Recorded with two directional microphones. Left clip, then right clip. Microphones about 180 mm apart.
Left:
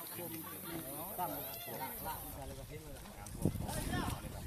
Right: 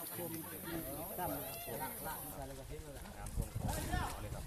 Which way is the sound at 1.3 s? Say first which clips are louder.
Right 1 dB; 30° right (ahead or behind).